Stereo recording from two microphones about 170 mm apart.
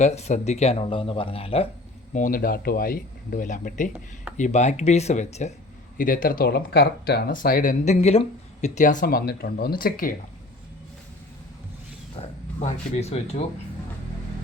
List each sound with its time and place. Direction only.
0.0 s speech: 40° left (ahead or behind)
2.1 s speech: 55° left (ahead or behind)
6.0 s speech: 55° left (ahead or behind)
12.1 s speech: 40° left (ahead or behind)